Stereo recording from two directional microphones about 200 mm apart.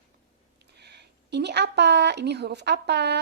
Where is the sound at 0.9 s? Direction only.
55° right (ahead or behind).